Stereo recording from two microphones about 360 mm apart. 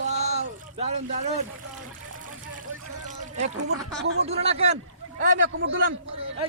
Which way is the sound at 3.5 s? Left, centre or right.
Right.